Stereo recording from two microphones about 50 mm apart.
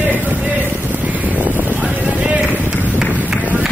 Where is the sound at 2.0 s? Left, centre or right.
Right.